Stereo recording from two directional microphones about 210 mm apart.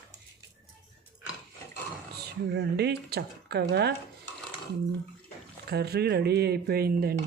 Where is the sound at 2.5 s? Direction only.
50° right (ahead or behind).